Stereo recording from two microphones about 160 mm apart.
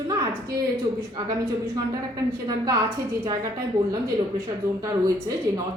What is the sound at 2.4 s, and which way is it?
Speech, 25° right (ahead or behind).